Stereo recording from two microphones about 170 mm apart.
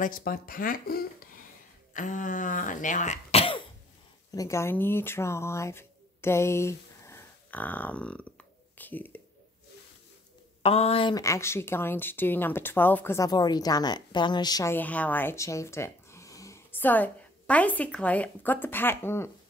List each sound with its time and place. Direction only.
0.0 s speech: 55° left (ahead or behind)
2.0 s speech: 50° left (ahead or behind)
4.3 s speech: 20° left (ahead or behind)
10.6 s speech: 35° left (ahead or behind)
11.1 s a woman's voice: 15° left (ahead or behind)